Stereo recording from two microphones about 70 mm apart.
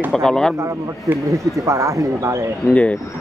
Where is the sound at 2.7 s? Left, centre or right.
Centre.